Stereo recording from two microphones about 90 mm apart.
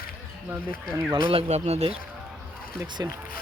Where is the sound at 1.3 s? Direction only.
90° right.